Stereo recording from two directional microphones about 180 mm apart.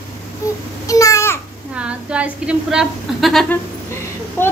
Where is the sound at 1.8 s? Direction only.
5° right (ahead or behind).